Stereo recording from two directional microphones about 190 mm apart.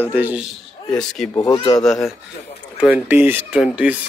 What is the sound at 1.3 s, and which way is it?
Speech, 20° left (ahead or behind).